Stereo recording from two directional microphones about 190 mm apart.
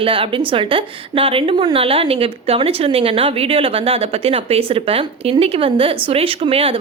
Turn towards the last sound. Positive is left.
turn(degrees=-30)  # may be behind; listen again after turning